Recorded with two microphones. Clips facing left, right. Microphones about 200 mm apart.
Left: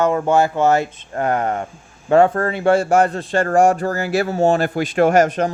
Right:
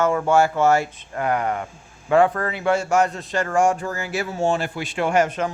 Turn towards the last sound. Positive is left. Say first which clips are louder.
# left 6 dB
turn(degrees=40)  # may be behind; listen again after turning